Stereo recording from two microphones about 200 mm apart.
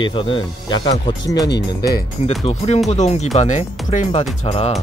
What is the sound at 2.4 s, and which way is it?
Speech, 35° left (ahead or behind).